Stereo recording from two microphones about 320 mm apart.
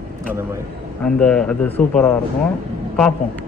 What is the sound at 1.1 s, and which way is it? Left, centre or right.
A man's voice, centre.